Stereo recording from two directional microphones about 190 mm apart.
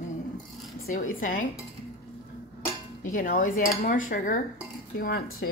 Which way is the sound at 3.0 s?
45° left (ahead or behind).